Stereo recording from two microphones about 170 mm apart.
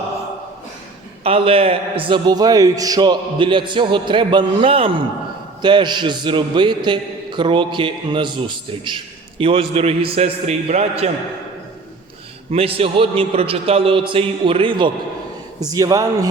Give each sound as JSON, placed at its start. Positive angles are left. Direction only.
{"t": 1.2, "sound": "a man's voice", "side_deg": -35}
{"t": 12.5, "sound": "a man's voice", "side_deg": -35}